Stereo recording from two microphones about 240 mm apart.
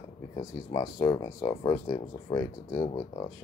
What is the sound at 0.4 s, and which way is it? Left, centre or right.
Speech, centre.